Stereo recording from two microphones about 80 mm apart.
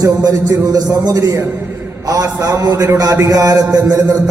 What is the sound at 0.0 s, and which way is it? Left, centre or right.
A man's voice, right.